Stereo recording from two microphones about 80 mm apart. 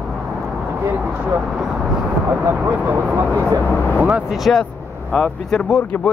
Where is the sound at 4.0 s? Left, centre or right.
Centre.